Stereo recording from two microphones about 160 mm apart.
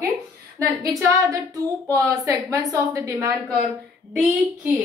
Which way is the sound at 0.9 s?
20° right (ahead or behind).